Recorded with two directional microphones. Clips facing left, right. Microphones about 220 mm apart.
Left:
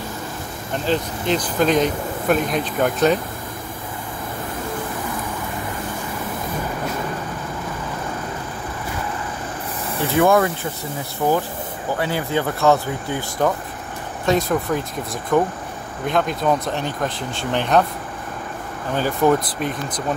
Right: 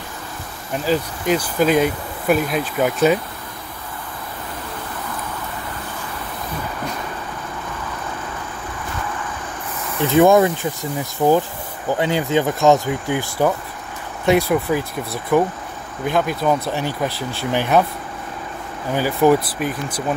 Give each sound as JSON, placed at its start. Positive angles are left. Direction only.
{"t": 0.8, "sound": "speech", "side_deg": -10}
{"t": 10.1, "sound": "speech", "side_deg": -20}
{"t": 18.9, "sound": "speech", "side_deg": -10}